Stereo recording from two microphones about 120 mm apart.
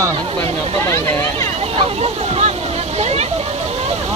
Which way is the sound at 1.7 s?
55° right (ahead or behind).